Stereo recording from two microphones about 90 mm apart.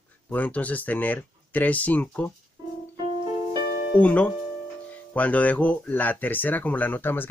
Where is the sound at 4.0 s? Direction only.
15° left (ahead or behind).